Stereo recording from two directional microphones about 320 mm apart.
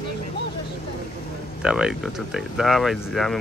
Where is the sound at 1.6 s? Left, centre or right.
Centre.